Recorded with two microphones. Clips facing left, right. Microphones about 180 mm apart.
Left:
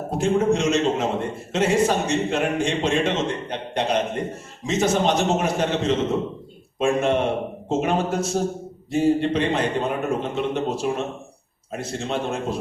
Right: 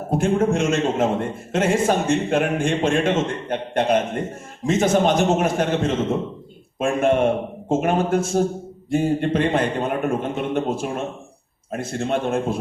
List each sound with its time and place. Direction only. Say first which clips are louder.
0.2 s a man's voice: left 1 dB; 55° right (ahead or behind)